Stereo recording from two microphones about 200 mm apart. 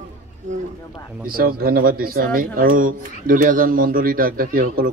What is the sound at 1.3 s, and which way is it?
A man's voice, 50° right (ahead or behind).